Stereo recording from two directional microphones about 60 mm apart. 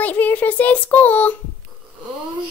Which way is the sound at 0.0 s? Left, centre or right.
Left.